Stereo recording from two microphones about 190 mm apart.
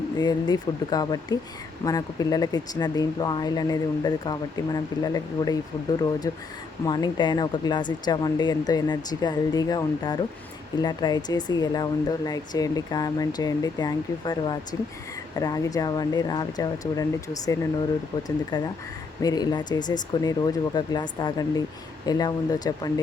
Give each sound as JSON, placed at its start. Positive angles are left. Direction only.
{"t": 0.2, "sound": "speech", "side_deg": 20}